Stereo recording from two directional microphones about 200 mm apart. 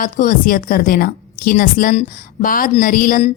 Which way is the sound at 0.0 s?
40° left (ahead or behind).